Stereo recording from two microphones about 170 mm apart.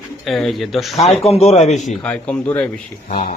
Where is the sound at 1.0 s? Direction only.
40° left (ahead or behind).